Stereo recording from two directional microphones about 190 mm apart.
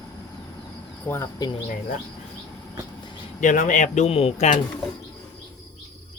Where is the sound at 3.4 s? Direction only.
45° left (ahead or behind).